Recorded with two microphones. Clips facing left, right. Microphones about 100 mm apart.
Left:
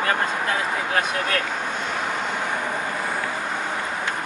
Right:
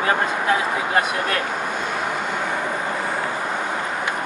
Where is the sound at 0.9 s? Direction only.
5° right (ahead or behind).